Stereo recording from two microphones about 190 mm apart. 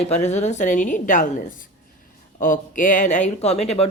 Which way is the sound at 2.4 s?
45° left (ahead or behind).